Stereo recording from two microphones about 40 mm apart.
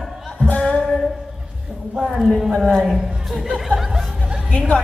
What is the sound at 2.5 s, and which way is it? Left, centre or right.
Speech, centre.